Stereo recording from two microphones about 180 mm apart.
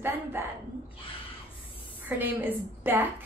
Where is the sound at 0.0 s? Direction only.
10° right (ahead or behind).